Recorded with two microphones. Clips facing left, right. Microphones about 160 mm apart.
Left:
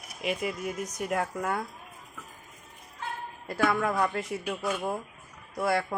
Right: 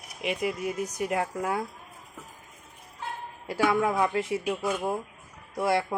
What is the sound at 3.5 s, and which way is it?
A man's voice, 10° right (ahead or behind).